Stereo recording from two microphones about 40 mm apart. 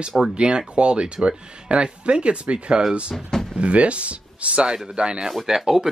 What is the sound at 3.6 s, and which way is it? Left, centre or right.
Speech, right.